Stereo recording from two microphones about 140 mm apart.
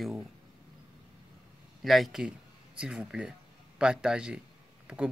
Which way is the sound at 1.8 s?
Centre (ahead or behind).